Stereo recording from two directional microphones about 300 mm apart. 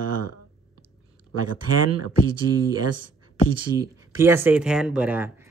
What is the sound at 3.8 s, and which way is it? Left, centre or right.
Speech, centre.